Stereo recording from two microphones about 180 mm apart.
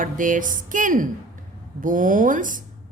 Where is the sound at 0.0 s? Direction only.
45° right (ahead or behind).